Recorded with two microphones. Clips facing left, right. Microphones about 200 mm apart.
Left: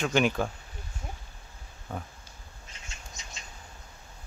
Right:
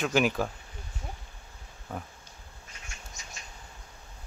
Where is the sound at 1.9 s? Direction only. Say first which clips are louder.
Even; 5° right (ahead or behind).